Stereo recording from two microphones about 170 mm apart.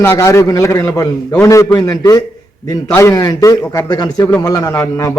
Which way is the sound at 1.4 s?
20° left (ahead or behind).